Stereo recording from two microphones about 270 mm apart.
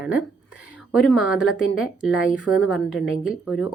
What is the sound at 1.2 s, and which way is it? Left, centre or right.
A woman's voice, centre.